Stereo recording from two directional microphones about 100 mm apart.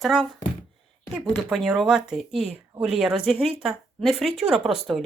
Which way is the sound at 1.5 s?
5° right (ahead or behind).